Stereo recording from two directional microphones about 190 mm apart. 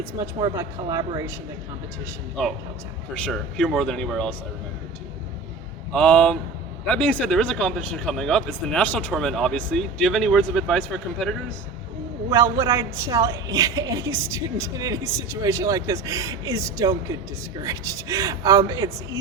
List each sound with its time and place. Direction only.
0.0 s speech: 20° right (ahead or behind)
3.2 s speech: 5° left (ahead or behind)
5.9 s speech: 5° left (ahead or behind)
12.3 s a woman's voice: 15° right (ahead or behind)